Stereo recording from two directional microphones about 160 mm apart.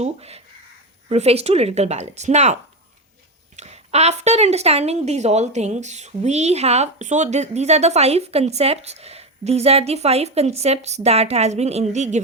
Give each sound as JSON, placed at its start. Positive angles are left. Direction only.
{"t": 0.0, "sound": "a woman's voice", "side_deg": -40}
{"t": 3.6, "sound": "a woman's voice", "side_deg": -40}